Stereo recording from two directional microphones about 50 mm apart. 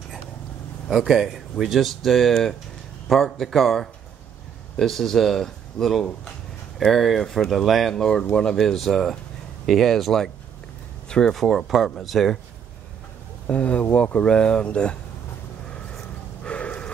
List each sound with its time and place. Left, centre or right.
0.8 s speech: centre
11.1 s speech: centre
11.3 s speech: centre
13.5 s speech: left
16.4 s a sound: left